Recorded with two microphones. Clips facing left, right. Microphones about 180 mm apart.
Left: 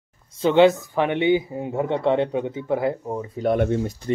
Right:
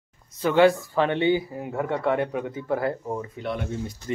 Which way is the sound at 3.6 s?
55° left (ahead or behind).